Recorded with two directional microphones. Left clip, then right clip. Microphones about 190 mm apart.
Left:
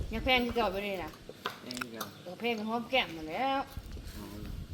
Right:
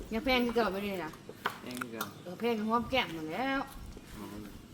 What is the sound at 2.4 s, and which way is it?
A woman's voice, 85° right.